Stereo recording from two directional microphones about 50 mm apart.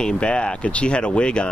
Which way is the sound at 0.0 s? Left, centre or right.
Left.